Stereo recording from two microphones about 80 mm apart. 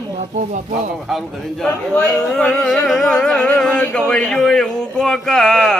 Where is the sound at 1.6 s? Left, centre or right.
Centre.